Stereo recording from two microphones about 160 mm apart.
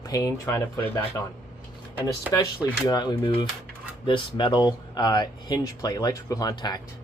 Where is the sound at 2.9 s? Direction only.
25° left (ahead or behind).